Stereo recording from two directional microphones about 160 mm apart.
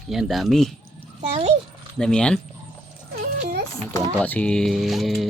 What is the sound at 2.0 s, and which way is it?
Speech, 5° left (ahead or behind).